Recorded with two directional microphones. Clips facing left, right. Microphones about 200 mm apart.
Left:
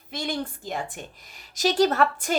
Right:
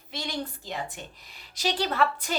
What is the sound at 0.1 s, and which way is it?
A woman's voice, 50° left (ahead or behind).